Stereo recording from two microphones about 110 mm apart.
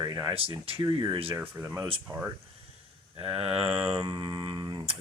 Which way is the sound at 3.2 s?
60° right (ahead or behind).